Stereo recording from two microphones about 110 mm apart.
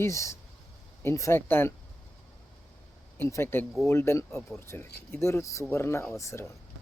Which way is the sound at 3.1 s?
20° left (ahead or behind).